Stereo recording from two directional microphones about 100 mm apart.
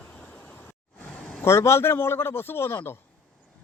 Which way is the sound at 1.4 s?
25° left (ahead or behind).